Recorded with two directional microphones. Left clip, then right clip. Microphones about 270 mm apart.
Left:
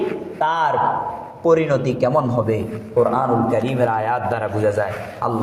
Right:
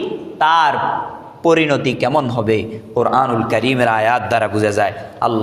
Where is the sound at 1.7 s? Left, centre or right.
Right.